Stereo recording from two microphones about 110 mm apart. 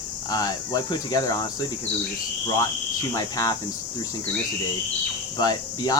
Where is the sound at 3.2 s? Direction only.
35° left (ahead or behind).